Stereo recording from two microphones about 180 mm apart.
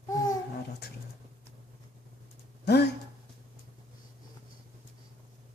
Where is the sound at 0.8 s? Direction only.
65° left (ahead or behind).